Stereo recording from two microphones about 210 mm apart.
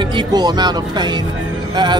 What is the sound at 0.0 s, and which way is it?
A man's voice, 20° right (ahead or behind).